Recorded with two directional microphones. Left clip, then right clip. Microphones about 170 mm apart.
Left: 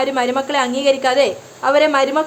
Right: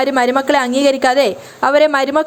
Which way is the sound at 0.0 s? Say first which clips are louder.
Right 4 dB; 40° right (ahead or behind).